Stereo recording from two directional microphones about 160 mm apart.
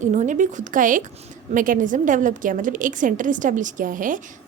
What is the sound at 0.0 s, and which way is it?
A woman's voice, 50° right (ahead or behind).